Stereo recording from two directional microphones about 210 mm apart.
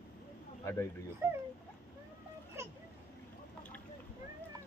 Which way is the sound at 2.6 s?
15° right (ahead or behind).